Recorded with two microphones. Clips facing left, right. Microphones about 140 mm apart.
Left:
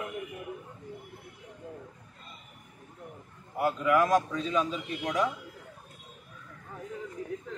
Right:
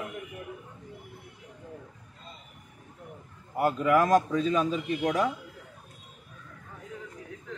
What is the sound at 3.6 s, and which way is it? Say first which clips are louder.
A man's voice: right 2 dB; 45° right (ahead or behind).